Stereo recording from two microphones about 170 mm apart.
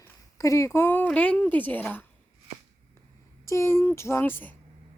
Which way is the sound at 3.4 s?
15° left (ahead or behind).